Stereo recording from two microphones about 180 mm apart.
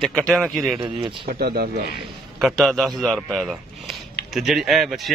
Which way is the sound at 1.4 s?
60° right (ahead or behind).